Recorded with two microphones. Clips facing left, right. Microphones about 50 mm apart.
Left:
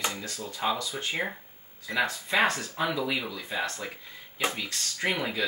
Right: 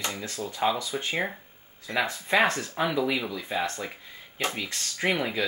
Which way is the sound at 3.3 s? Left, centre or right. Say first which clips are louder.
Right 3 dB; centre.